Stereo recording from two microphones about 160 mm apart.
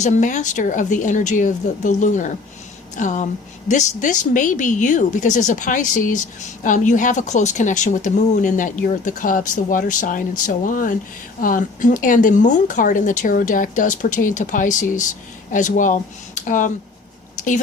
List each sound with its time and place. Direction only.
0.0 s speech: 50° left (ahead or behind)